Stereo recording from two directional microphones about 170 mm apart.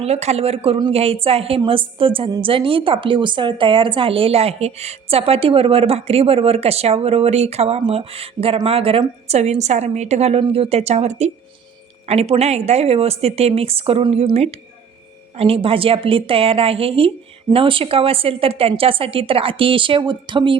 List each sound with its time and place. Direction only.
0.0 s a woman's voice: 40° right (ahead or behind)